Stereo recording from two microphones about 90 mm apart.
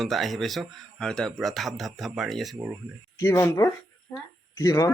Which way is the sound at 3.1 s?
35° left (ahead or behind).